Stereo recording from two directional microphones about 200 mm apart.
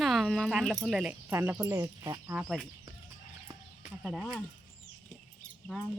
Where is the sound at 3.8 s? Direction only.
Centre (ahead or behind).